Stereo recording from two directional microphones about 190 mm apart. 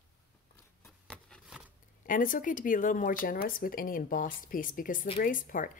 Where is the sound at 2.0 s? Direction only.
45° left (ahead or behind).